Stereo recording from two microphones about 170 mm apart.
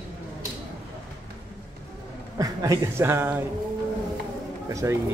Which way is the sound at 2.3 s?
20° right (ahead or behind).